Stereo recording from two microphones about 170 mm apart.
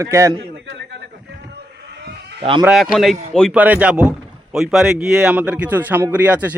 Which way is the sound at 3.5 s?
10° right (ahead or behind).